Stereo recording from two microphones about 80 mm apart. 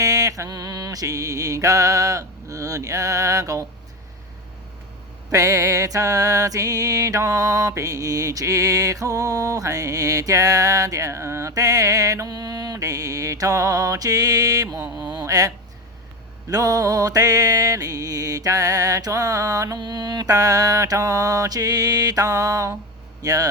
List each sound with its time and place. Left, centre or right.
0.0 s music: right
5.3 s music: right
19.8 s music: right